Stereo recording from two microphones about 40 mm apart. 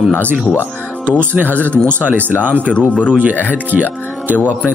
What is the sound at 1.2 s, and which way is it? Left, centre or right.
Speech, right.